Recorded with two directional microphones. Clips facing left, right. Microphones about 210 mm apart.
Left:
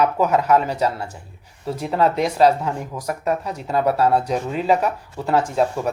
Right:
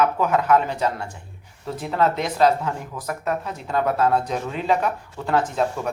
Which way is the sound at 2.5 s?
10° left (ahead or behind).